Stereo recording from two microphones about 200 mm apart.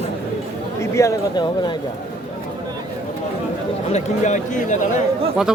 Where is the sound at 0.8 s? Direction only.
15° left (ahead or behind).